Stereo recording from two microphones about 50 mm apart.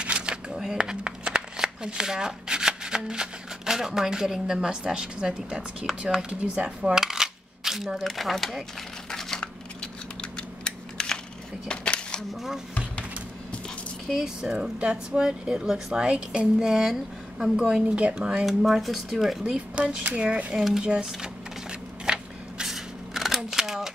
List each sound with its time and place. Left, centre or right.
0.0 s shuffling cards: right
0.5 s a sound: centre
0.7 s speech: centre
5.9 s speech: centre
7.0 s coin: centre
9.1 s scissors: centre
11.6 s a sound: left
14.2 s speech: centre
17.9 s speech: right
18.4 s speech: centre
19.4 s speech: right
20.8 s a sound: centre